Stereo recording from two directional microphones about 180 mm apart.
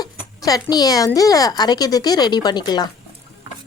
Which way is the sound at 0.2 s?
20° left (ahead or behind).